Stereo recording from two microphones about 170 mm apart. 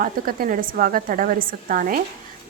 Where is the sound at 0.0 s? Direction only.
55° right (ahead or behind).